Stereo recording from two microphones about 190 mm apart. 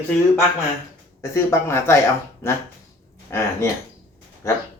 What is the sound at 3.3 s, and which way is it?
Speech, 15° left (ahead or behind).